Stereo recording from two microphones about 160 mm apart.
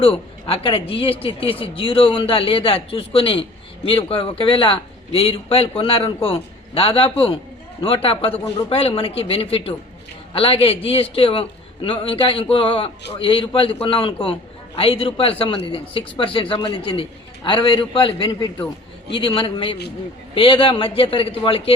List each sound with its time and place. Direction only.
0.0 s speech: 35° left (ahead or behind)